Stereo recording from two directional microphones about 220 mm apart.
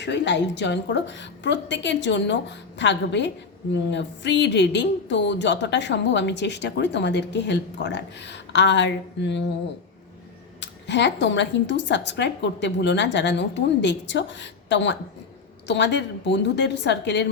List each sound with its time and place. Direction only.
0.0 s a woman's voice: 55° left (ahead or behind)
10.6 s a woman's voice: 55° left (ahead or behind)